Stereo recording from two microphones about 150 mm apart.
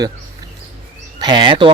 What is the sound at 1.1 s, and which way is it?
Speech, 30° right (ahead or behind).